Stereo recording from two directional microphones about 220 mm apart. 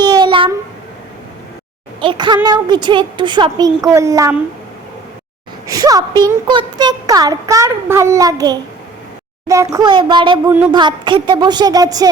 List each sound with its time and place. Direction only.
0.0 s a sound: 20° right (ahead or behind)
2.0 s a woman's voice: 20° right (ahead or behind)
5.6 s a woman's voice: 15° right (ahead or behind)